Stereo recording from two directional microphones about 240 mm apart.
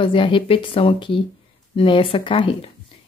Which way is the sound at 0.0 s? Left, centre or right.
Left.